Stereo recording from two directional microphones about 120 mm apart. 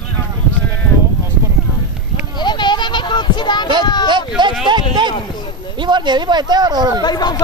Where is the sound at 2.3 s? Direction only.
40° left (ahead or behind).